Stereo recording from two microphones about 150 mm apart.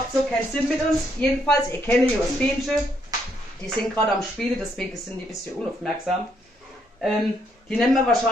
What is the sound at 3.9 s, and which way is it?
Speech, 5° left (ahead or behind).